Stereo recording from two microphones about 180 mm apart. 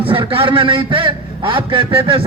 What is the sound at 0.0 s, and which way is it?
A man's voice, 30° right (ahead or behind).